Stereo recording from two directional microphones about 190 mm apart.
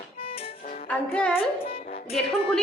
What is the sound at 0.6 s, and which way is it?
Music, 50° left (ahead or behind).